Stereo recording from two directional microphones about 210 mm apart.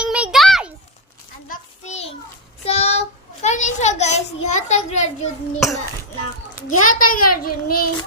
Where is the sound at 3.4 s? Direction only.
35° left (ahead or behind).